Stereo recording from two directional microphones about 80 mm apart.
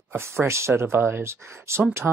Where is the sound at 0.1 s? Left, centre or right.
Right.